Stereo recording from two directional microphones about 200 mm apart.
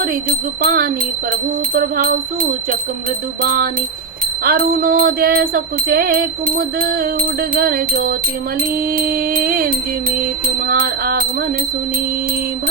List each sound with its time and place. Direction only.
0.0 s music: 45° right (ahead or behind)